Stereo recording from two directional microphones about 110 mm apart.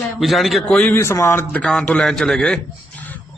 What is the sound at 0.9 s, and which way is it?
Speech, 25° left (ahead or behind).